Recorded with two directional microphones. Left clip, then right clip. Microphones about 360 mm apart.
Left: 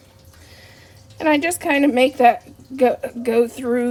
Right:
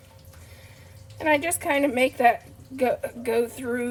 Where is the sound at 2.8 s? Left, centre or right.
Left.